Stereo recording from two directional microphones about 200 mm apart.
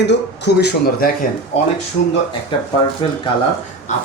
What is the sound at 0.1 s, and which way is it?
Speech, 55° left (ahead or behind).